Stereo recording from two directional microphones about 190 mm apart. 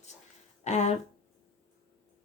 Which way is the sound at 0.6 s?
35° left (ahead or behind).